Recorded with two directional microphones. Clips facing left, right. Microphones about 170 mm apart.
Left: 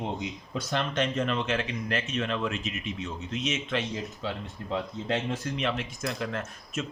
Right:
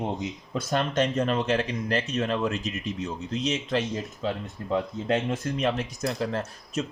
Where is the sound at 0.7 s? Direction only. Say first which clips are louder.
Right 4 dB; 40° right (ahead or behind).